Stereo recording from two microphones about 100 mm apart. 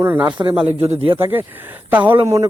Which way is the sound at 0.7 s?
90° right.